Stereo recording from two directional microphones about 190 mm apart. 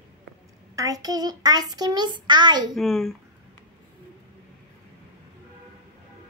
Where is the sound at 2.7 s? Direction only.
Centre (ahead or behind).